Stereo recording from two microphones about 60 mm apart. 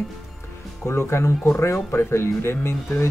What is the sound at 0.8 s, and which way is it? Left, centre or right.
Speech, left.